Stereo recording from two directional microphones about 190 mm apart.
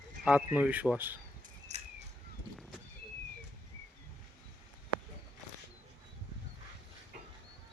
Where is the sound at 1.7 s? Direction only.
40° right (ahead or behind).